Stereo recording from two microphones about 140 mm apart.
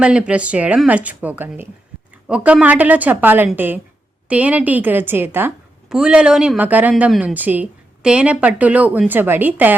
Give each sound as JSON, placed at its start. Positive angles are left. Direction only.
{"t": 0.0, "sound": "a woman's voice", "side_deg": -10}